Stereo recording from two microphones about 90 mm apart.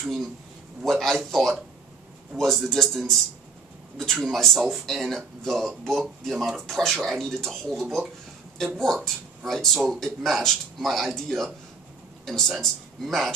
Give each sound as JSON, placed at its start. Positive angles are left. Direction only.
{"t": 0.0, "sound": "speech", "side_deg": -5}